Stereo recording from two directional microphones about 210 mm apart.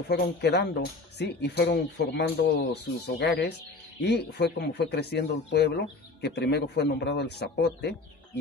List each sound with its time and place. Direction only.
0.1 s speech: 55° left (ahead or behind)